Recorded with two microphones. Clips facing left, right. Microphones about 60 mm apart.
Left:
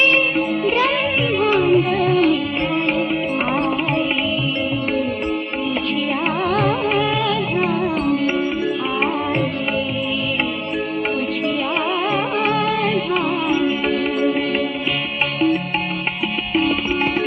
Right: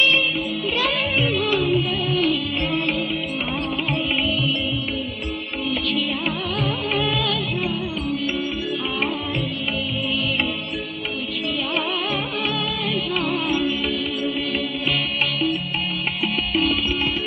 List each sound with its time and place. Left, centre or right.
1.4 s music: left
12.4 s music: left